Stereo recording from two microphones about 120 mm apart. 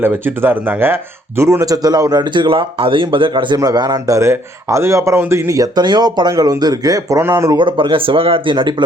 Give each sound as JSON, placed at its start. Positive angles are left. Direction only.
{"t": 0.0, "sound": "speech", "side_deg": -15}
{"t": 7.5, "sound": "speech", "side_deg": -40}